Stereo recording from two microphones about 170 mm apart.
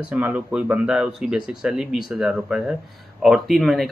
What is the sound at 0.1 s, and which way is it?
Speech, 10° right (ahead or behind).